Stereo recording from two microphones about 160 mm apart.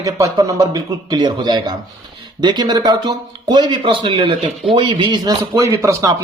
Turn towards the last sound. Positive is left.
turn(degrees=-20)  # may be behind; listen again after turning